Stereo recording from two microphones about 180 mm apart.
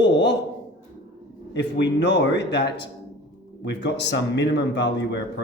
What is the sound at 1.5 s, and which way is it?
A man's voice, 75° left (ahead or behind).